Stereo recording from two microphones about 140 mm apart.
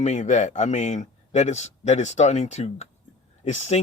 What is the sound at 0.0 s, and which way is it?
A man's voice, 55° left (ahead or behind).